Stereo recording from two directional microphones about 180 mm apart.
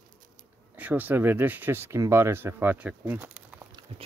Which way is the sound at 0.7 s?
10° right (ahead or behind).